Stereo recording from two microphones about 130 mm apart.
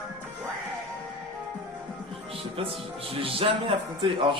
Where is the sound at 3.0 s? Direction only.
45° right (ahead or behind).